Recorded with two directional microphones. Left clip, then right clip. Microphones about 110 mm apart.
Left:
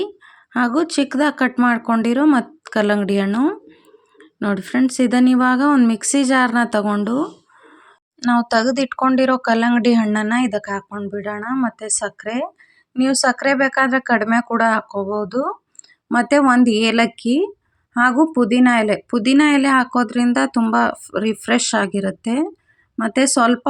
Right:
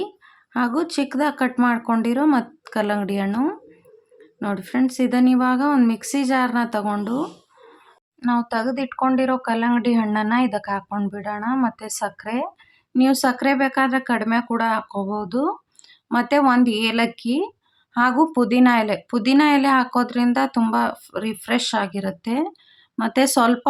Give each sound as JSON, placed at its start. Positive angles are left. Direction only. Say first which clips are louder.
{"t": 0.5, "sound": "speech", "louder": "left 4 dB", "side_deg": 35}
{"t": 10.1, "sound": "speech", "louder": "left 2 dB", "side_deg": 25}
{"t": 11.1, "sound": "speech", "louder": "left 3 dB", "side_deg": 20}
{"t": 13.0, "sound": "speech", "louder": "left 2 dB", "side_deg": 40}